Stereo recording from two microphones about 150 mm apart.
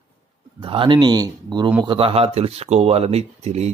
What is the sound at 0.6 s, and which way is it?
Speech, 35° right (ahead or behind).